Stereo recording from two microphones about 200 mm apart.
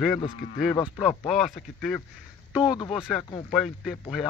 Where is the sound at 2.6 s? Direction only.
20° left (ahead or behind).